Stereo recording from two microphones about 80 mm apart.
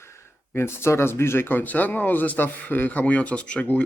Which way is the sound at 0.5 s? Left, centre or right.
Left.